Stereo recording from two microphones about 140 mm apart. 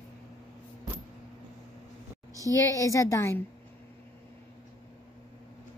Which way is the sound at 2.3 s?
25° right (ahead or behind).